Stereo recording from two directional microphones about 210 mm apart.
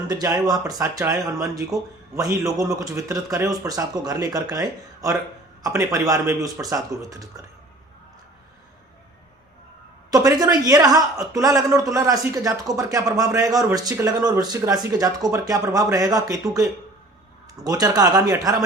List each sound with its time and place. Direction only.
0.1 s speech: 15° right (ahead or behind)
10.1 s speech: 15° right (ahead or behind)